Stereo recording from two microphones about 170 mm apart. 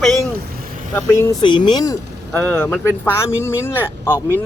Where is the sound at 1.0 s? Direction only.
15° left (ahead or behind).